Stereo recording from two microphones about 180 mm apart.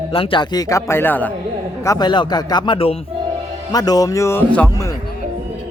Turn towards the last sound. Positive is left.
turn(degrees=10)  # may be behind; listen again after turning